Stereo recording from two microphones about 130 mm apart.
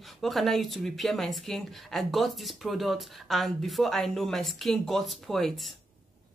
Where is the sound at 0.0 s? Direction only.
Centre (ahead or behind).